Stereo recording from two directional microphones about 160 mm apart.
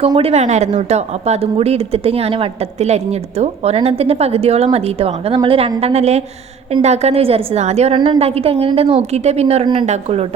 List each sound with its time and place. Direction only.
0.2 s a woman's voice: 40° right (ahead or behind)